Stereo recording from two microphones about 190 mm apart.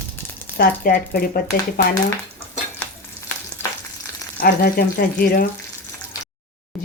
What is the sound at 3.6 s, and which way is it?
Frying, 10° left (ahead or behind).